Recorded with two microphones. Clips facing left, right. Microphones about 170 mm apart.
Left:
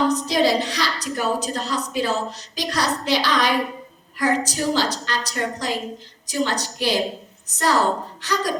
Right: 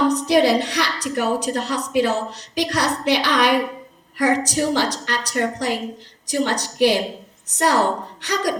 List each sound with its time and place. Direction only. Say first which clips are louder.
0.1 s a woman's voice: right 3 dB; 65° right (ahead or behind)